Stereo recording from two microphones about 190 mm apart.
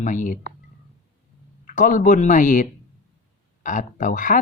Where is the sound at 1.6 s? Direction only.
40° left (ahead or behind).